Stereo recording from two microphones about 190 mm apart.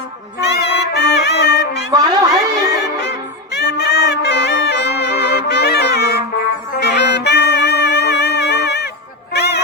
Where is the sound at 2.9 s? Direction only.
60° left (ahead or behind).